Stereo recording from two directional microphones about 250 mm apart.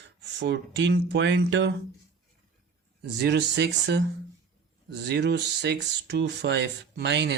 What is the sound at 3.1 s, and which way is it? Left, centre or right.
Speech, right.